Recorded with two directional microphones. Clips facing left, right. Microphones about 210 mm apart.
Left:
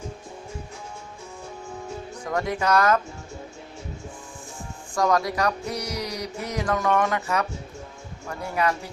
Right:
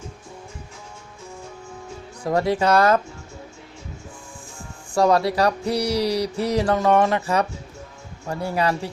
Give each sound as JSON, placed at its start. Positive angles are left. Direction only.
{"t": 2.2, "sound": "speech", "side_deg": -30}
{"t": 4.9, "sound": "speech", "side_deg": -30}